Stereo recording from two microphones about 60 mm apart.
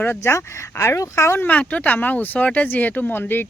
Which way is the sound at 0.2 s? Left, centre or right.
Left.